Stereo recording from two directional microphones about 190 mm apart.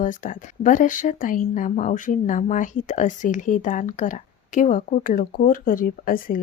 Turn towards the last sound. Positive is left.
turn(degrees=50)  # may be behind; listen again after turning